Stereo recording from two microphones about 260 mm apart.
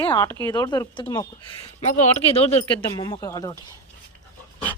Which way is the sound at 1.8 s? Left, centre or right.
Left.